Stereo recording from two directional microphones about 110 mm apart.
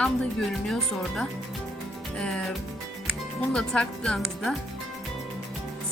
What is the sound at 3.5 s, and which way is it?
Speech, 5° left (ahead or behind).